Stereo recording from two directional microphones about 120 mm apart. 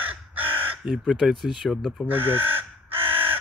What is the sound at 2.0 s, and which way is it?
Crow, 15° right (ahead or behind).